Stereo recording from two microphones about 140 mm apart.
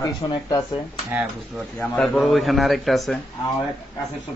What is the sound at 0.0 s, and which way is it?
Speech, 25° left (ahead or behind).